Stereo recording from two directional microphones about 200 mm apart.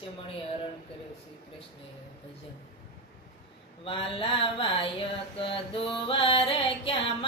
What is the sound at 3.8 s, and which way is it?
Music, 25° left (ahead or behind).